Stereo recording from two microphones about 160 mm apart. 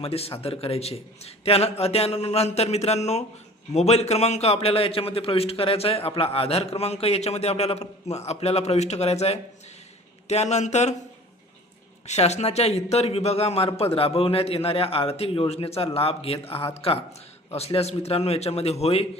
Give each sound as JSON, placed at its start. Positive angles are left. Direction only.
{"t": 0.0, "sound": "a man's voice", "side_deg": 40}
{"t": 12.0, "sound": "a man's voice", "side_deg": 45}